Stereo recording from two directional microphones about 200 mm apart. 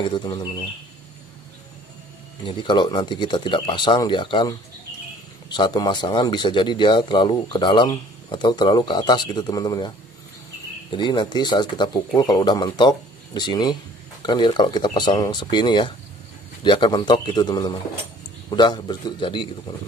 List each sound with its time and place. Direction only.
0.1 s speech: 20° left (ahead or behind)
2.4 s speech: 25° left (ahead or behind)